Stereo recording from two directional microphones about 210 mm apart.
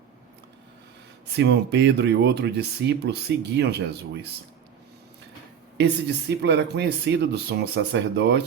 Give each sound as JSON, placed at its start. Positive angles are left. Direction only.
{"t": 1.3, "sound": "speech", "side_deg": -55}
{"t": 5.7, "sound": "speech", "side_deg": -55}